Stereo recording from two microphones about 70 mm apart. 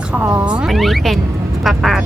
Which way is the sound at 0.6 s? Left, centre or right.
Centre.